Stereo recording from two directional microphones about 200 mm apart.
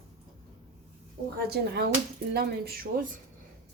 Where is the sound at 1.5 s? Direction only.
50° right (ahead or behind).